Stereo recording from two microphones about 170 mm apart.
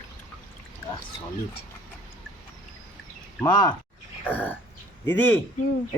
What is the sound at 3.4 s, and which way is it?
Speech, 25° left (ahead or behind).